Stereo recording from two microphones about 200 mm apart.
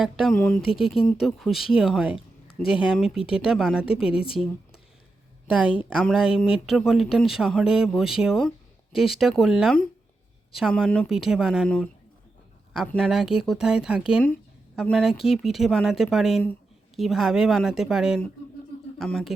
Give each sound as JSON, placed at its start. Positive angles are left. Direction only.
{"t": 0.0, "sound": "speech", "side_deg": 0}
{"t": 4.1, "sound": "speech", "side_deg": 25}
{"t": 5.5, "sound": "a woman's voice", "side_deg": -5}
{"t": 12.9, "sound": "speech", "side_deg": 0}